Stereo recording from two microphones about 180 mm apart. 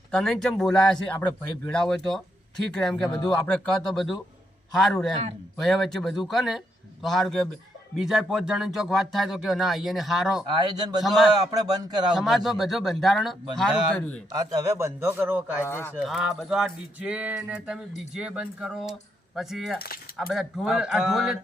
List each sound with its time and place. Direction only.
0.1 s speech: 5° left (ahead or behind)
3.2 s speech: 25° left (ahead or behind)
3.4 s speech: centre (ahead or behind)
10.5 s speech: 20° right (ahead or behind)
11.0 s speech: centre (ahead or behind)
11.5 s speech: 25° right (ahead or behind)
12.1 s speech: centre (ahead or behind)
14.3 s a man's voice: 20° right (ahead or behind)
15.6 s speech: 15° left (ahead or behind)
16.0 s speech: centre (ahead or behind)